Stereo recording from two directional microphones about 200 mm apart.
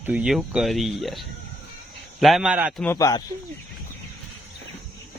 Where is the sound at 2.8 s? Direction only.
15° left (ahead or behind).